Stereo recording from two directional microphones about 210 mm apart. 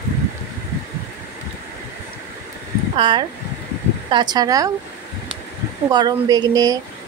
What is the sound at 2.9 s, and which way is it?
Speech, 25° right (ahead or behind).